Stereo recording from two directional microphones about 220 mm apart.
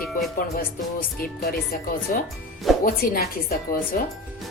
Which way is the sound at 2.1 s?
40° left (ahead or behind).